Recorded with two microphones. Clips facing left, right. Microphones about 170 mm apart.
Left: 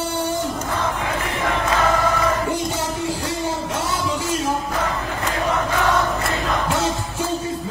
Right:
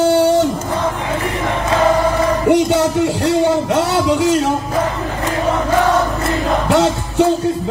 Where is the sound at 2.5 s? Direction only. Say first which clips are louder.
Right 11 dB; 75° right (ahead or behind).